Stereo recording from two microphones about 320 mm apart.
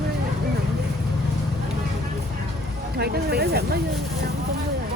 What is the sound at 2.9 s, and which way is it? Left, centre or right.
Speech, right.